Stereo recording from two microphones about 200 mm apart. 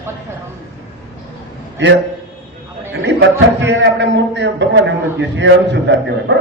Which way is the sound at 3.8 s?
65° right (ahead or behind).